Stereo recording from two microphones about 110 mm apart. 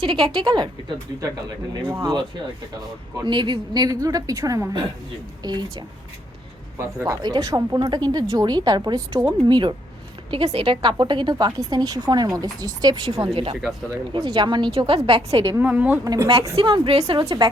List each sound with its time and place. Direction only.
0.0 s a woman's voice: 45° right (ahead or behind)
3.2 s a woman's voice: 45° right (ahead or behind)
10.3 s a woman's voice: 60° right (ahead or behind); by 13.0 s 35° right (ahead or behind)
13.2 s speech: 60° right (ahead or behind)
14.3 s a woman's voice: 45° right (ahead or behind)
15.6 s speech: 15° right (ahead or behind)
16.0 s a woman's voice: 30° right (ahead or behind)
16.6 s a woman's voice: 50° right (ahead or behind)